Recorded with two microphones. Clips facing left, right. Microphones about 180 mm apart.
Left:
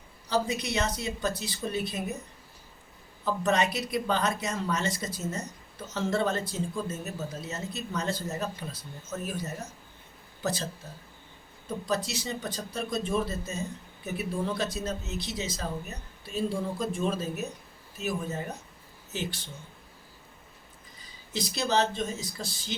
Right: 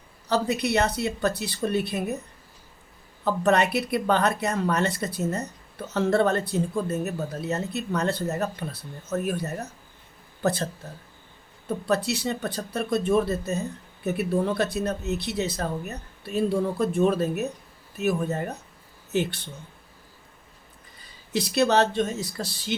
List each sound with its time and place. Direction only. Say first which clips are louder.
0.3 s speech: right 5 dB; 60° right (ahead or behind)
3.4 s speech: right 5 dB; 60° right (ahead or behind)
11.9 s speech: right 6 dB; 65° right (ahead or behind)
21.3 s speech: right 6 dB; 65° right (ahead or behind)